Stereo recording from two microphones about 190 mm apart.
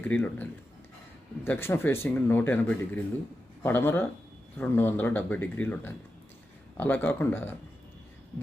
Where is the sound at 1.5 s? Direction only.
10° left (ahead or behind).